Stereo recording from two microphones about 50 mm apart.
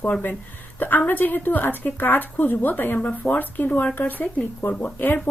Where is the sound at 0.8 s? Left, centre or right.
Left.